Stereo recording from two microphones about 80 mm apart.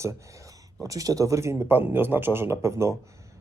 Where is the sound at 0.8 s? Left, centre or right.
Right.